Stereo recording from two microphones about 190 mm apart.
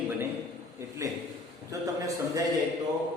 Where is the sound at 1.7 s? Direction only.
15° right (ahead or behind).